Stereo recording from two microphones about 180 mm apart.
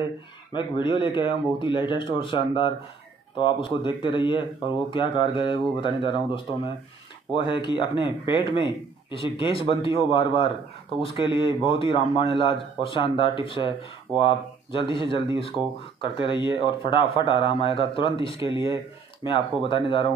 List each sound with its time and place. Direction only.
0.5 s a man's voice: 25° left (ahead or behind)